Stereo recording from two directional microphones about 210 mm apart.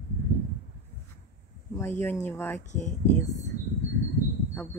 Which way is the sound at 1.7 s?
10° left (ahead or behind).